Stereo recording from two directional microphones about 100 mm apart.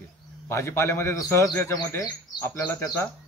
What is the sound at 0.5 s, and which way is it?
A man's voice, 25° left (ahead or behind).